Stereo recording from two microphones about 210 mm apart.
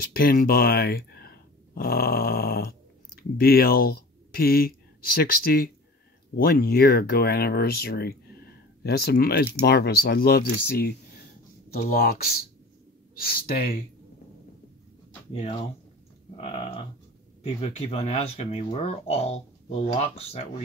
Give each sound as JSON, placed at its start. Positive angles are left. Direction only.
{"t": 0.0, "sound": "speech", "side_deg": 45}
{"t": 16.3, "sound": "speech", "side_deg": 30}